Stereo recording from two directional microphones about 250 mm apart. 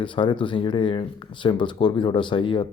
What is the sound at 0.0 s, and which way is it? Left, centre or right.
Speech, centre.